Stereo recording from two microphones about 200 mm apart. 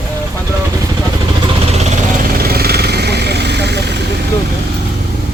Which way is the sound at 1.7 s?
35° right (ahead or behind).